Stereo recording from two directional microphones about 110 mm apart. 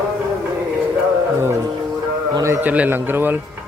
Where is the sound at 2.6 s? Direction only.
15° right (ahead or behind).